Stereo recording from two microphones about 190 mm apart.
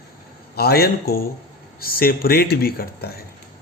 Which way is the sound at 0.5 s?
55° left (ahead or behind).